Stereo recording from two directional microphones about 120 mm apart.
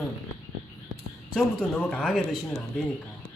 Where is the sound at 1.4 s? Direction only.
10° left (ahead or behind).